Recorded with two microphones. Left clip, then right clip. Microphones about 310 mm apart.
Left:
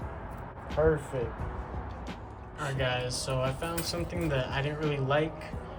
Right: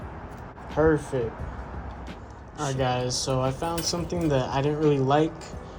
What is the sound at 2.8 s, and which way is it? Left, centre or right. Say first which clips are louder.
Speech: right 5 dB; centre.